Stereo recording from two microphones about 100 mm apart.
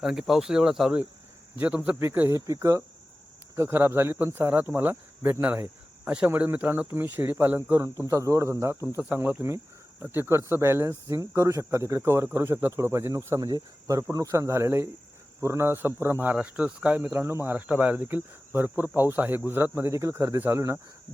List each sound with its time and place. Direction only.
0.0 s speech: 5° right (ahead or behind)
1.5 s speech: 15° right (ahead or behind)
9.0 s speech: 20° right (ahead or behind)